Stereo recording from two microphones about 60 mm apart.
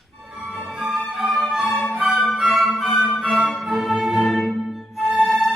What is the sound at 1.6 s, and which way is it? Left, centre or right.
Music, centre.